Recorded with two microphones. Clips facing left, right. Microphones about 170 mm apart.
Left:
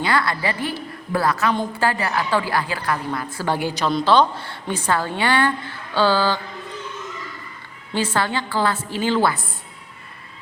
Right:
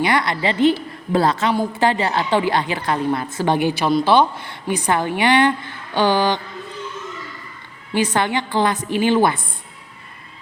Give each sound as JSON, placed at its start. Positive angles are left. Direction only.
{"t": 0.0, "sound": "a woman's voice", "side_deg": -20}
{"t": 7.9, "sound": "a woman's voice", "side_deg": -15}